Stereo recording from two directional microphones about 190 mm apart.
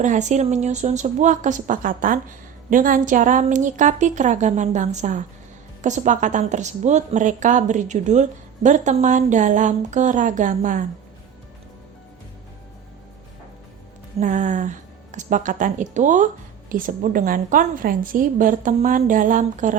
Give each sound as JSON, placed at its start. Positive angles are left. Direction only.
{"t": 0.0, "sound": "a woman's voice", "side_deg": -40}
{"t": 14.2, "sound": "a woman's voice", "side_deg": -40}